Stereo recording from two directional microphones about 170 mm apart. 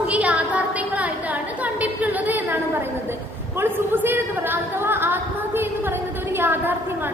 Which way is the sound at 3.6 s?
10° right (ahead or behind).